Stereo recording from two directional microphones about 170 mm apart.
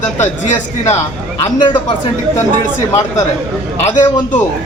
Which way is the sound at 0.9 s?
25° left (ahead or behind).